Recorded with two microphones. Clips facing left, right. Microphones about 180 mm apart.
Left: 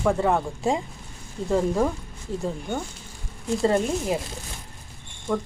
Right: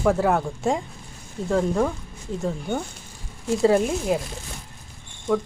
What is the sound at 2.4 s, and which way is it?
Speech, 5° right (ahead or behind).